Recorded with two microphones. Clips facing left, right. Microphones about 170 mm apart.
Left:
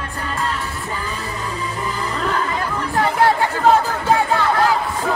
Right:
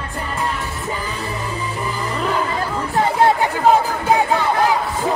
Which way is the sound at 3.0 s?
20° right (ahead or behind).